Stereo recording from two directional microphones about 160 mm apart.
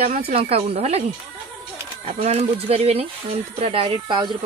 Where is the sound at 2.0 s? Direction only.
45° right (ahead or behind).